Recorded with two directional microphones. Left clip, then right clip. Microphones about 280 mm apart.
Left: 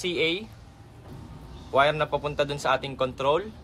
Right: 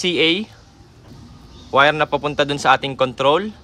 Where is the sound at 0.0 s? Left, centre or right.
Right.